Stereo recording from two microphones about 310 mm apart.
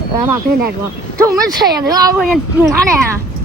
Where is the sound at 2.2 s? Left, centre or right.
Centre.